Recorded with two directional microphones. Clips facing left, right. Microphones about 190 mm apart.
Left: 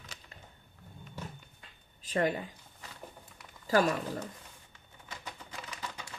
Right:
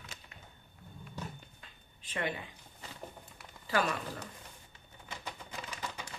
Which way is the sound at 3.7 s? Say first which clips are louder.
Left 5 dB; 40° left (ahead or behind).